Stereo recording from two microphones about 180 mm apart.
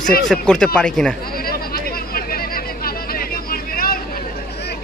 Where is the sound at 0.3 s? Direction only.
5° left (ahead or behind).